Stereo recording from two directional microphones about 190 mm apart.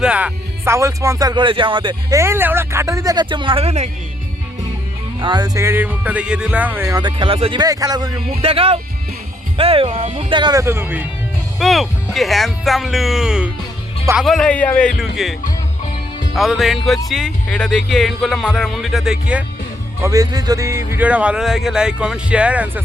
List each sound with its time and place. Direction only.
0.0 s speech: 5° right (ahead or behind); by 3.8 s 30° right (ahead or behind)
5.2 s speech: 20° right (ahead or behind)
11.6 s speech: centre (ahead or behind)
16.3 s speech: centre (ahead or behind)
20.0 s speech: 15° right (ahead or behind)